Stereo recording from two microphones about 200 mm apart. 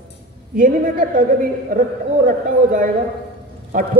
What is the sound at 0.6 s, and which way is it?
A man's voice, 40° right (ahead or behind).